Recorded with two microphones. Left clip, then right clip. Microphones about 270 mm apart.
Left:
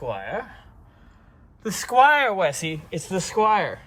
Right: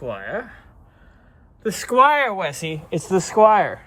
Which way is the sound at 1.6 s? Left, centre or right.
Centre.